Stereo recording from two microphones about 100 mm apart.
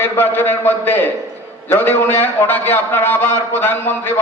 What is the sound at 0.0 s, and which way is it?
A man's voice, 20° left (ahead or behind).